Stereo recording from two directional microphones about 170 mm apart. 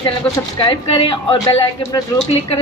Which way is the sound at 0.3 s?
30° left (ahead or behind).